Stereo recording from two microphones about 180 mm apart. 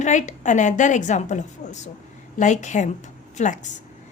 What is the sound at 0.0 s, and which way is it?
A woman's voice, 40° left (ahead or behind).